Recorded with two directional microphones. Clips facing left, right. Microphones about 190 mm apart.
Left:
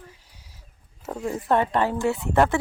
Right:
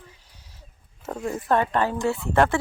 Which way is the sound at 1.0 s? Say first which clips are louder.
Even; 10° left (ahead or behind).